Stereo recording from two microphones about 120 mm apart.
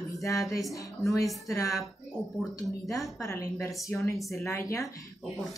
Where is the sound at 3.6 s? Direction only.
25° left (ahead or behind).